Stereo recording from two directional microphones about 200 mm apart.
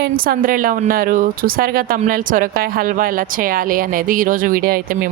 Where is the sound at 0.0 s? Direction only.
45° right (ahead or behind).